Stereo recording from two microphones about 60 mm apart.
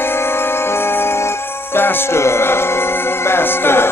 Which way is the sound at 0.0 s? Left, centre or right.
Left.